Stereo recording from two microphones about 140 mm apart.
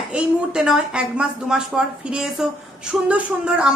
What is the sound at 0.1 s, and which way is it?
A woman's voice, 5° right (ahead or behind).